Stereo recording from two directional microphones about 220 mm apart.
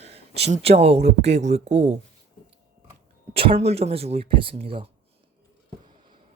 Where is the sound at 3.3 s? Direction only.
25° right (ahead or behind).